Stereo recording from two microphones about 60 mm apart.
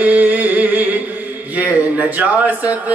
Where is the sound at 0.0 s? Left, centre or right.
Right.